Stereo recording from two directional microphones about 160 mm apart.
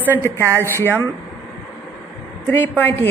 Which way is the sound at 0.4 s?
15° right (ahead or behind).